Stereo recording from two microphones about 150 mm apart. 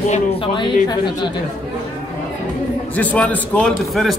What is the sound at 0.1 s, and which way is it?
Speech, 35° left (ahead or behind).